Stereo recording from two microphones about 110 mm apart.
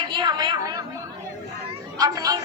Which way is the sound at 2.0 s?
35° right (ahead or behind).